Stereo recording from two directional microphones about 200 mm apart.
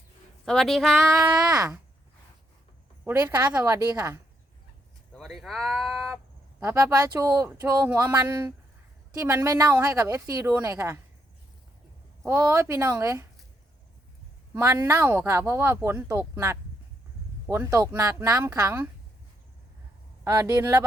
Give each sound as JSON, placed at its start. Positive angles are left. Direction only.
{"t": 0.4, "sound": "a woman's voice", "side_deg": 0}
{"t": 0.9, "sound": "speech", "side_deg": -15}
{"t": 3.2, "sound": "speech", "side_deg": -15}
{"t": 5.1, "sound": "speech", "side_deg": 0}
{"t": 6.6, "sound": "speech", "side_deg": -15}
{"t": 8.1, "sound": "speech", "side_deg": -20}
{"t": 12.2, "sound": "speech", "side_deg": -15}
{"t": 14.5, "sound": "speech", "side_deg": -15}
{"t": 20.2, "sound": "speech", "side_deg": -15}